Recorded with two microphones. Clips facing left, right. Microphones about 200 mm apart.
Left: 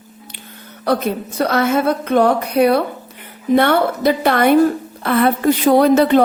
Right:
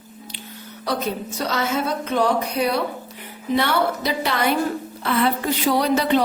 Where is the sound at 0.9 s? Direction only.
55° left (ahead or behind).